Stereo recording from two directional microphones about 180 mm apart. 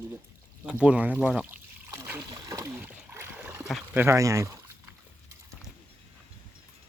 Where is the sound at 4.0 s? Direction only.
15° right (ahead or behind).